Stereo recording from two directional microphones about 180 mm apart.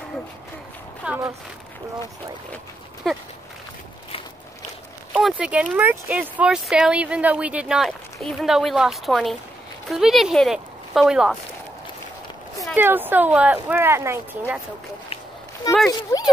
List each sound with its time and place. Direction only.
1.0 s speech: 10° right (ahead or behind)
3.1 s speech: centre (ahead or behind)
5.1 s speech: 5° right (ahead or behind)
12.7 s speech: 10° right (ahead or behind)
15.9 s a child's voice: 20° left (ahead or behind)